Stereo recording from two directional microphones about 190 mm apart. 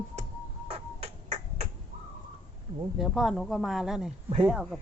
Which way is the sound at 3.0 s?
Centre (ahead or behind).